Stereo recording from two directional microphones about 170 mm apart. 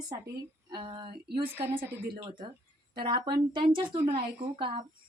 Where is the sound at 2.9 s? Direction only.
30° right (ahead or behind).